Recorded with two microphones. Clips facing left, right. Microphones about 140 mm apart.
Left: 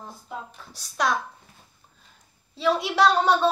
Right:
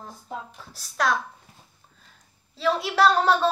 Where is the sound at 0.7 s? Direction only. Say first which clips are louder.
Even; centre (ahead or behind).